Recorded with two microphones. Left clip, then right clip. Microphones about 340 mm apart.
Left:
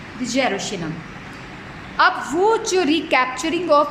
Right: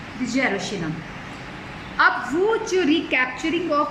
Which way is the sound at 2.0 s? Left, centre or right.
Centre.